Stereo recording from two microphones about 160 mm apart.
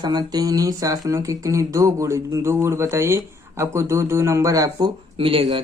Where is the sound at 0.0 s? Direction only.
25° right (ahead or behind).